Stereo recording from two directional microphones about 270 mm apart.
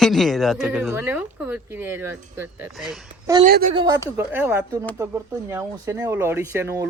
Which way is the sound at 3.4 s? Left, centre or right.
Right.